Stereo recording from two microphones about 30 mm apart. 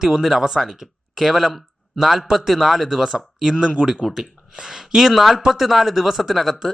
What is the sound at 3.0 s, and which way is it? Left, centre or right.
Speech, centre.